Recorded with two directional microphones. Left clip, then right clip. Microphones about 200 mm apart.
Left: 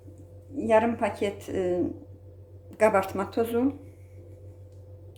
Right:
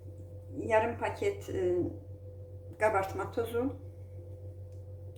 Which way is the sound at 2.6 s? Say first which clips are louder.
Left 7 dB; 55° left (ahead or behind).